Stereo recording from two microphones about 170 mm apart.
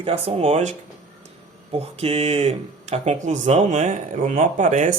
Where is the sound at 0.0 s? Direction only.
35° right (ahead or behind).